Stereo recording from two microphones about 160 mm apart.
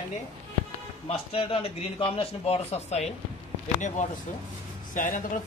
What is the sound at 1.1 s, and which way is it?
Speech, 35° left (ahead or behind).